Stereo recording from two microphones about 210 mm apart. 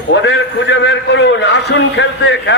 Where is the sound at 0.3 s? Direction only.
60° left (ahead or behind).